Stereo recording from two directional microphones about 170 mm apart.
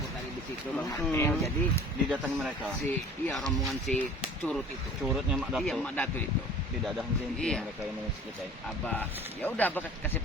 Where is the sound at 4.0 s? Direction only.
10° left (ahead or behind).